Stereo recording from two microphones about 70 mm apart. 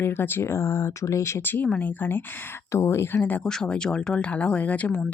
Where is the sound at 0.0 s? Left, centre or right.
Left.